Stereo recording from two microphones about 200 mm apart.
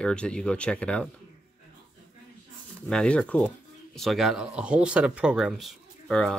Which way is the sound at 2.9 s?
5° left (ahead or behind).